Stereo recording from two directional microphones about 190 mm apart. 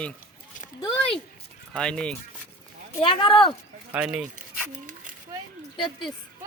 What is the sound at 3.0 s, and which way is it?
Speech, 25° left (ahead or behind).